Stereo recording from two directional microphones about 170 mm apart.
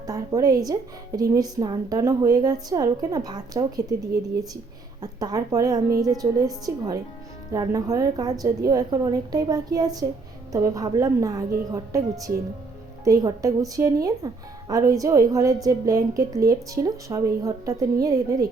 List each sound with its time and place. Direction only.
0.0 s a woman's voice: 20° right (ahead or behind)
4.9 s a woman's voice: 20° right (ahead or behind)